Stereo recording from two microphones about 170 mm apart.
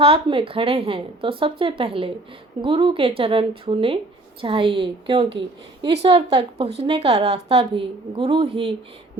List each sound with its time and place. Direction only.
0.0 s a woman's voice: 30° right (ahead or behind)